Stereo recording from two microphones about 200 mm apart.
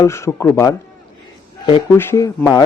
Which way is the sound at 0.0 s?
15° left (ahead or behind).